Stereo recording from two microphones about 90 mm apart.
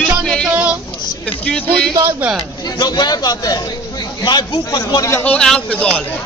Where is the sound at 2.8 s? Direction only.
50° left (ahead or behind).